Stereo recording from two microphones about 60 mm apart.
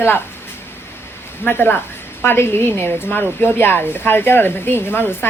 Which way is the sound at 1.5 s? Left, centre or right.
Left.